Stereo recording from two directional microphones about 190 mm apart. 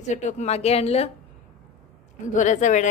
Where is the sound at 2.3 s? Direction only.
40° left (ahead or behind).